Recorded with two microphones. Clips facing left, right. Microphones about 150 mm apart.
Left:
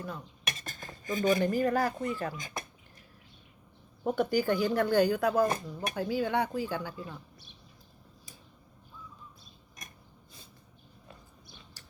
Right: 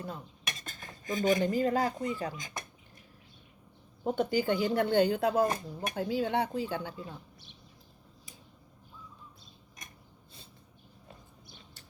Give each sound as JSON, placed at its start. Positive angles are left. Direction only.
{"t": 1.0, "sound": "speech", "side_deg": -20}
{"t": 4.0, "sound": "speech", "side_deg": -20}
{"t": 11.1, "sound": "a sound", "side_deg": -25}